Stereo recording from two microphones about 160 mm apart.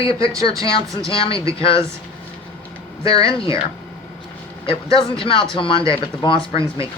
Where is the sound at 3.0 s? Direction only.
35° left (ahead or behind).